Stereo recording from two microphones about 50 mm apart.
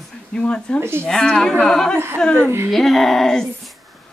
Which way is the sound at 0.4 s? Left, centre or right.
Centre.